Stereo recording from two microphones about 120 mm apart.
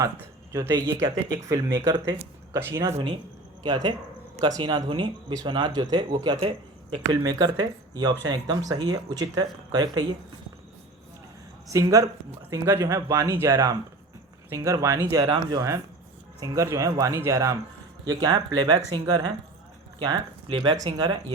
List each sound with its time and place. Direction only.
0.5 s speech: 25° right (ahead or behind)
3.6 s speech: 35° right (ahead or behind)
6.1 s speech: 50° right (ahead or behind)
7.1 s speech: 35° right (ahead or behind)
11.7 s speech: 30° right (ahead or behind)